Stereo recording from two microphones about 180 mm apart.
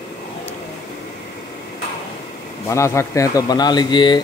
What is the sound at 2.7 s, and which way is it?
Speech, 15° left (ahead or behind).